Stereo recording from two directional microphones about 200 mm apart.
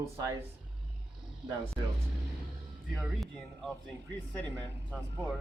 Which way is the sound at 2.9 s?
Centre (ahead or behind).